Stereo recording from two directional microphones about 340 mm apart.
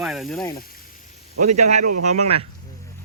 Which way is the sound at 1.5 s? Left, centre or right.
Centre.